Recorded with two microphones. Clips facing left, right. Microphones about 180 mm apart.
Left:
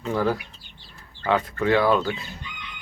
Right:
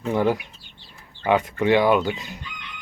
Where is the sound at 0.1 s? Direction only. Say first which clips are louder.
Right 3 dB; 20° right (ahead or behind).